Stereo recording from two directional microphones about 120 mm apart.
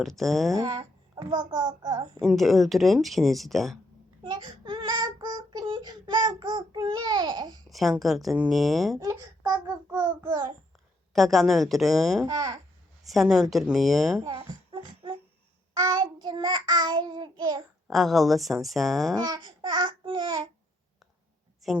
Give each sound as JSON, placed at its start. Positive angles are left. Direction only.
{"t": 0.0, "sound": "speech", "side_deg": 0}
{"t": 0.5, "sound": "a child's voice", "side_deg": -30}
{"t": 2.2, "sound": "speech", "side_deg": 0}
{"t": 4.2, "sound": "child singing", "side_deg": -40}
{"t": 7.7, "sound": "speech", "side_deg": 0}
{"t": 9.9, "sound": "child singing", "side_deg": -25}
{"t": 11.1, "sound": "speech", "side_deg": 0}
{"t": 12.2, "sound": "child singing", "side_deg": -35}
{"t": 13.1, "sound": "speech", "side_deg": 0}
{"t": 14.3, "sound": "music", "side_deg": -45}
{"t": 15.8, "sound": "child singing", "side_deg": -35}
{"t": 17.8, "sound": "speech", "side_deg": 0}
{"t": 19.1, "sound": "child singing", "side_deg": -35}